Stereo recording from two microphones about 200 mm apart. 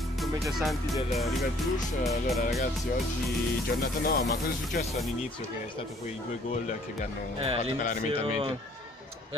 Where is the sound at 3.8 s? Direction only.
50° left (ahead or behind).